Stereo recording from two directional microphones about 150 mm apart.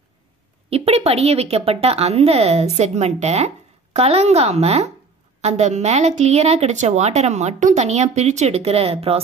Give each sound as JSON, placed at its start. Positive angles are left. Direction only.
{"t": 0.7, "sound": "speech", "side_deg": -45}